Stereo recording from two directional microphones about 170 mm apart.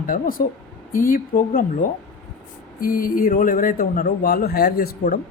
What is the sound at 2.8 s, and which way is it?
Speech, 55° left (ahead or behind).